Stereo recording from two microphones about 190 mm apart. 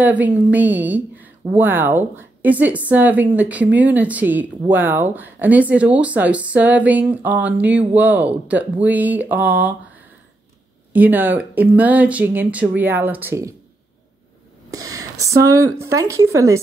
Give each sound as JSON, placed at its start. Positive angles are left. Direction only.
{"t": 0.0, "sound": "speech", "side_deg": -10}
{"t": 10.9, "sound": "speech", "side_deg": -10}
{"t": 14.7, "sound": "speech", "side_deg": -20}